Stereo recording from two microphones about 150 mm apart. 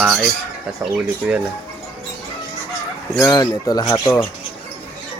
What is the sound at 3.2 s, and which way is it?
Speech, 20° left (ahead or behind).